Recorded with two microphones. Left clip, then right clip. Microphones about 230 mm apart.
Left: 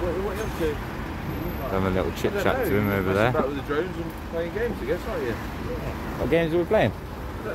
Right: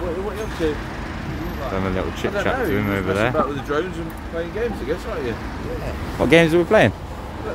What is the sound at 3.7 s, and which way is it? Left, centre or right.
Speech, right.